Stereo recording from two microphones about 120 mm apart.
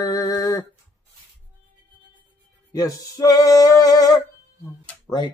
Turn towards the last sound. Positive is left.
turn(degrees=35)  # may be behind; listen again after turning